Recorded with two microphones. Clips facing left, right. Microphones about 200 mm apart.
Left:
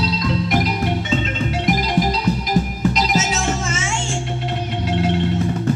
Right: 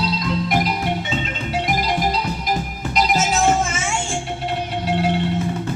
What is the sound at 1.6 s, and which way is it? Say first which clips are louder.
Music: left 3 dB; 50° right (ahead or behind).